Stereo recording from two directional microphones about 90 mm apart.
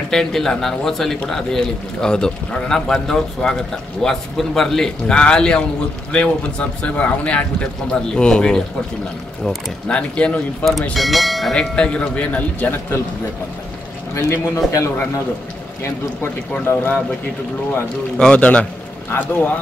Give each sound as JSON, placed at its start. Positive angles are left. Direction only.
{"t": 0.1, "sound": "a man's voice", "side_deg": 5}
{"t": 10.6, "sound": "speech", "side_deg": 5}
{"t": 14.4, "sound": "a man's voice", "side_deg": 35}
{"t": 15.8, "sound": "speech", "side_deg": 25}
{"t": 18.1, "sound": "a man's voice", "side_deg": 10}